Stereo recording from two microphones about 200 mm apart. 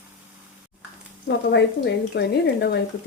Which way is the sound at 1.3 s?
60° left (ahead or behind).